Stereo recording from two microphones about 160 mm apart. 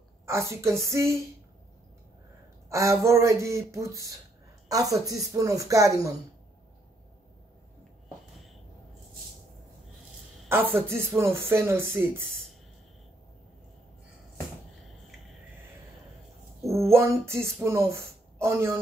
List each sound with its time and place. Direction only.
0.3 s speech: 15° right (ahead or behind)
2.7 s speech: 20° right (ahead or behind)
10.5 s speech: 15° right (ahead or behind)
16.9 s speech: 15° right (ahead or behind)